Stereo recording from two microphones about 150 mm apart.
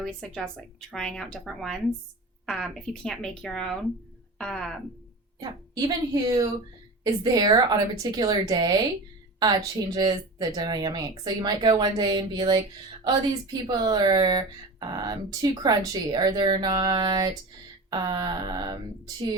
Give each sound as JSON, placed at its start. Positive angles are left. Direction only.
{"t": 0.0, "sound": "speech", "side_deg": 5}
{"t": 6.2, "sound": "speech", "side_deg": -25}